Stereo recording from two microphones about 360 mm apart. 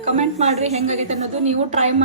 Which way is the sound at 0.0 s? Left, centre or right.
Centre.